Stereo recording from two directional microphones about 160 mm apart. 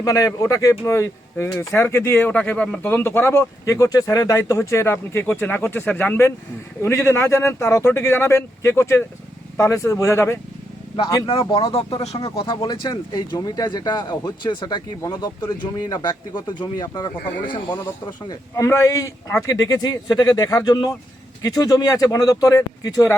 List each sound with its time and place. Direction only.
0.0 s speech: 20° left (ahead or behind)
10.9 s speech: 30° left (ahead or behind)